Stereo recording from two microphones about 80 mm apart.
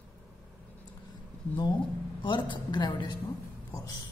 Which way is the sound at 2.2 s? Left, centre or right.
Left.